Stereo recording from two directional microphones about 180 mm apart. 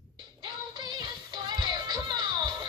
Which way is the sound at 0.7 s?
25° right (ahead or behind).